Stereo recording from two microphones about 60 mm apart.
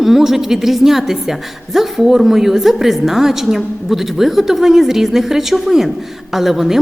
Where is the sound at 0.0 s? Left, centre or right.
Centre.